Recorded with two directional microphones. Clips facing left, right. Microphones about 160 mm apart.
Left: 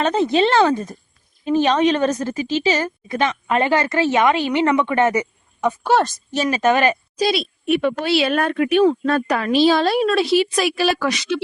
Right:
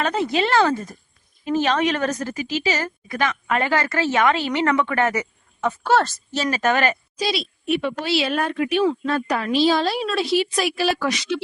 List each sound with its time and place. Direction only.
0.0 s a woman's voice: 20° left (ahead or behind)
7.2 s speech: 55° left (ahead or behind); by 11.4 s 75° left (ahead or behind)